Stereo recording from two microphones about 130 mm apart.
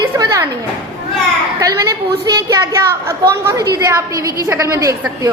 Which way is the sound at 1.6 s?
25° right (ahead or behind).